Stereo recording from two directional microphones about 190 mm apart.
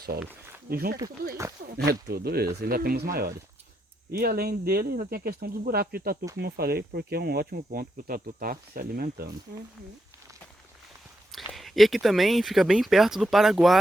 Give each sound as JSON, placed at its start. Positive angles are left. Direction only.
{"t": 0.7, "sound": "speech", "side_deg": -55}
{"t": 11.3, "sound": "speech", "side_deg": 0}